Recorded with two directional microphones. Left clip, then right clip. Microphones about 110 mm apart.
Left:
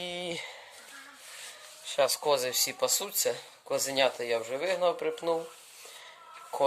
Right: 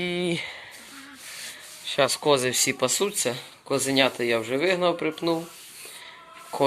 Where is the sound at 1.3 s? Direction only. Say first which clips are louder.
Right 7 dB; 5° left (ahead or behind).